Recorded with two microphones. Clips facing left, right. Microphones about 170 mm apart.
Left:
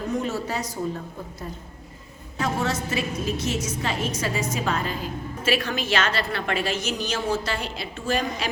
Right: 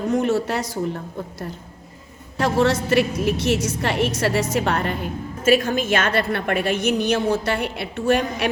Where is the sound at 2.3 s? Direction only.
70° right (ahead or behind).